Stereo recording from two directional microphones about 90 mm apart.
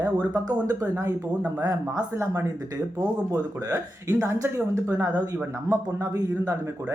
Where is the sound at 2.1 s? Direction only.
35° right (ahead or behind).